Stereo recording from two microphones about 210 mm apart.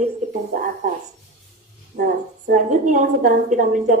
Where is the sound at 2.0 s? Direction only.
40° right (ahead or behind).